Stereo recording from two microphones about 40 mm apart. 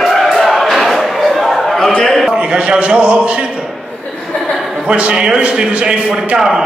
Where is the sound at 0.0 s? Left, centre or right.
Centre.